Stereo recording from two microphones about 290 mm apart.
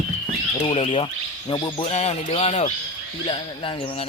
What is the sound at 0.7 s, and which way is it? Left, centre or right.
Speech, centre.